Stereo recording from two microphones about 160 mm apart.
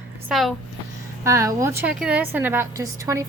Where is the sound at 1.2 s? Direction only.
15° right (ahead or behind).